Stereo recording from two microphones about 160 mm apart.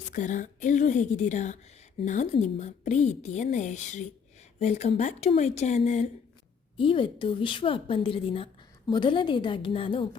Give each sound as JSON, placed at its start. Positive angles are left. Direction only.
{"t": 0.1, "sound": "a woman's voice", "side_deg": 50}
{"t": 6.7, "sound": "a woman's voice", "side_deg": 35}